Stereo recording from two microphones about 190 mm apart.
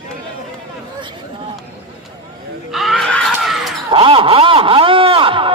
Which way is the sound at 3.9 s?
25° right (ahead or behind).